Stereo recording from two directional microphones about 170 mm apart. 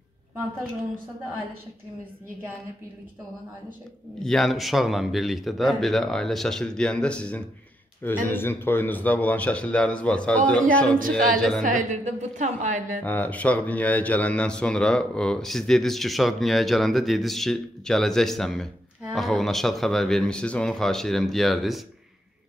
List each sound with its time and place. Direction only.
4.2 s speech: centre (ahead or behind)
11.6 s a woman's voice: 45° right (ahead or behind)
13.0 s speech: 10° left (ahead or behind)